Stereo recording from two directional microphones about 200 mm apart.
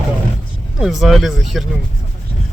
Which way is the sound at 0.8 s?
Centre (ahead or behind).